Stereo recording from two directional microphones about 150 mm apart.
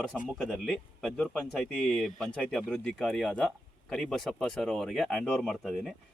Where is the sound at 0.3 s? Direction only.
Centre (ahead or behind).